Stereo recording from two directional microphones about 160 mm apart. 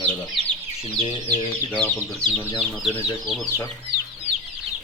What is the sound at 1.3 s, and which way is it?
Speech, 10° left (ahead or behind).